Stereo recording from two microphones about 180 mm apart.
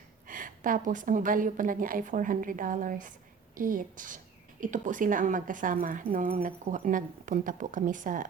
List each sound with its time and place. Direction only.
0.3 s a woman's voice: 50° right (ahead or behind)